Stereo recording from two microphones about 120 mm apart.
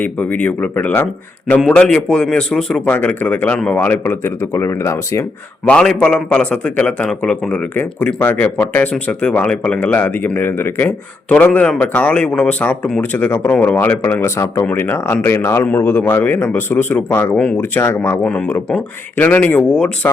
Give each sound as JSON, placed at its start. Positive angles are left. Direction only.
{"t": 0.0, "sound": "speech", "side_deg": 10}
{"t": 5.6, "sound": "speech", "side_deg": 10}
{"t": 18.2, "sound": "speech", "side_deg": 10}